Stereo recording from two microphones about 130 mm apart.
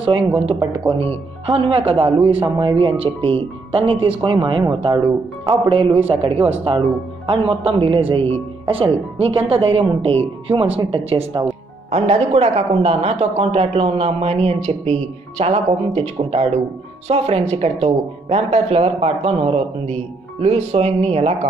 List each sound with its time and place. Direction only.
0.3 s speech: 40° right (ahead or behind)